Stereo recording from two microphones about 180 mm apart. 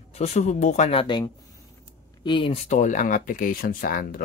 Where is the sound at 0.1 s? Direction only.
35° left (ahead or behind).